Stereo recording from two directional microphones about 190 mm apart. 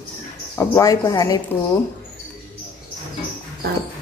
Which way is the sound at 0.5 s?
15° left (ahead or behind).